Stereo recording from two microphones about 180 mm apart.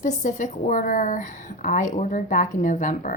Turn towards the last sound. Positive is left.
turn(degrees=45)  # may be behind; listen again after turning